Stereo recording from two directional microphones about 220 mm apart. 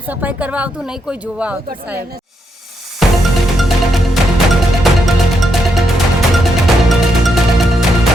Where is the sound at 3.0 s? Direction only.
Centre (ahead or behind).